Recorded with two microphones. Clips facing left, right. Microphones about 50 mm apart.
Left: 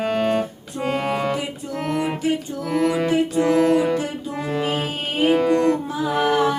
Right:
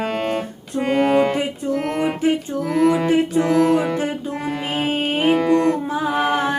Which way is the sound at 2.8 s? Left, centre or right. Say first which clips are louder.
Right 4 dB; centre.